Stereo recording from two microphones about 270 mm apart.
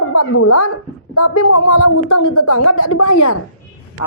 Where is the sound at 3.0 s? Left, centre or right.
Left.